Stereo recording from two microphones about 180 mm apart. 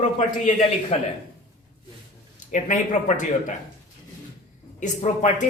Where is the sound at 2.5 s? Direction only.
45° left (ahead or behind).